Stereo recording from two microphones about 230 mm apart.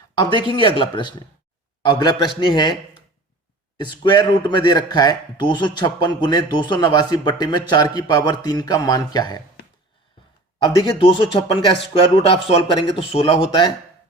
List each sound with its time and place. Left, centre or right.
0.2 s a man's voice: centre
3.8 s a man's voice: centre
10.6 s a man's voice: left